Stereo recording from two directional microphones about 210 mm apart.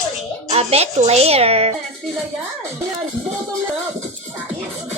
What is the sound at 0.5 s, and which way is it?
A woman's voice, 30° right (ahead or behind).